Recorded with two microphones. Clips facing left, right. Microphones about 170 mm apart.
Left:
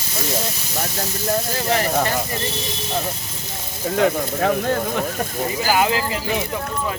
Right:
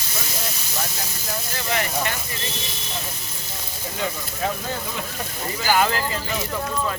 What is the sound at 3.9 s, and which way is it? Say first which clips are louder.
Speech: left 11 dB; 65° left (ahead or behind).